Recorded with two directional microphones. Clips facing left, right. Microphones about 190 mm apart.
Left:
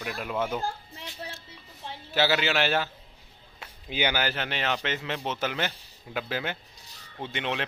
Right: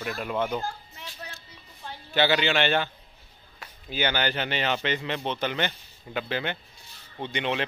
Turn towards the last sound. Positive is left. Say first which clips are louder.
# right 3 dB
turn(degrees=0)  # may be behind; listen again after turning